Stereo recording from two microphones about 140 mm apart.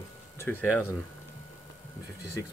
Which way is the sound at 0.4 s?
15° left (ahead or behind).